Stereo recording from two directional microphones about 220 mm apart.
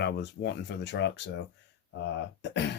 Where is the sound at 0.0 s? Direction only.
50° left (ahead or behind).